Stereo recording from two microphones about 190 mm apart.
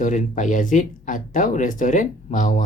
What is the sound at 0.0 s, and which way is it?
Speech, 40° left (ahead or behind).